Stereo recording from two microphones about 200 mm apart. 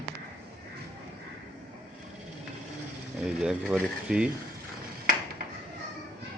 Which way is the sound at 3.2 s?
5° right (ahead or behind).